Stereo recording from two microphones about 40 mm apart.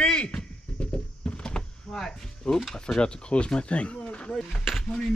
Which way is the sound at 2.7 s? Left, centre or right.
Centre.